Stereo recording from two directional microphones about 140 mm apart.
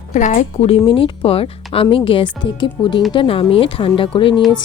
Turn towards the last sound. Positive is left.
turn(degrees=40)  # may be behind; listen again after turning